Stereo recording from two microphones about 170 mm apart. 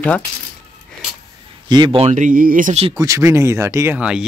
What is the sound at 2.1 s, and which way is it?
Speech, 50° right (ahead or behind).